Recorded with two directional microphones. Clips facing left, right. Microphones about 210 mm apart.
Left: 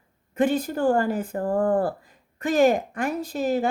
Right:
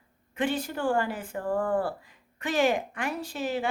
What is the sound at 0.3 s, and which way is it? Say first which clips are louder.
A woman's voice: left 7 dB; 40° left (ahead or behind).